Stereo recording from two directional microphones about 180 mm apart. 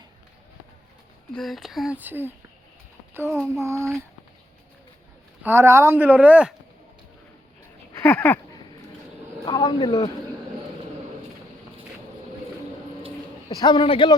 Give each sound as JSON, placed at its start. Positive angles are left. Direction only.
{"t": 1.3, "sound": "speech", "side_deg": 0}
{"t": 5.4, "sound": "speech", "side_deg": -15}
{"t": 7.9, "sound": "speech", "side_deg": 10}
{"t": 9.4, "sound": "speech", "side_deg": 25}
{"t": 13.5, "sound": "a man's voice", "side_deg": 25}